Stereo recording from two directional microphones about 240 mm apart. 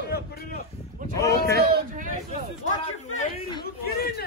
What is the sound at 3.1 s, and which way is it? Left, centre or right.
Speech, left.